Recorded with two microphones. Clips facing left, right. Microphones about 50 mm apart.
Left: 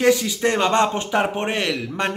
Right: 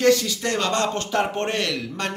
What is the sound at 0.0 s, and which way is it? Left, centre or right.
Speech, centre.